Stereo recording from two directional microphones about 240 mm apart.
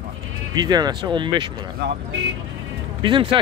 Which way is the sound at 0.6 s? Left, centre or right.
Centre.